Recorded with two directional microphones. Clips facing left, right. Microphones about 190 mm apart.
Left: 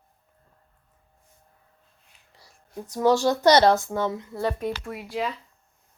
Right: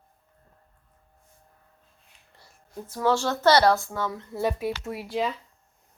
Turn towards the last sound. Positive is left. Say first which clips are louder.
# right 1 dB
turn(degrees=-5)  # may be behind; listen again after turning